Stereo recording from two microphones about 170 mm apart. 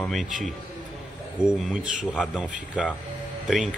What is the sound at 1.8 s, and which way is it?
Speech, 50° right (ahead or behind).